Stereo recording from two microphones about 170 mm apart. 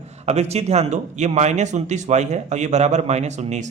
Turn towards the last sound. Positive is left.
turn(degrees=-45)  # may be behind; listen again after turning